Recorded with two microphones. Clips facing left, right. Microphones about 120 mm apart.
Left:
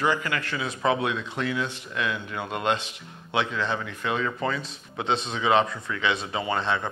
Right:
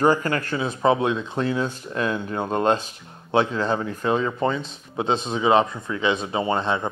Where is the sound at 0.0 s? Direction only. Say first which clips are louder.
Right 6 dB; 45° right (ahead or behind).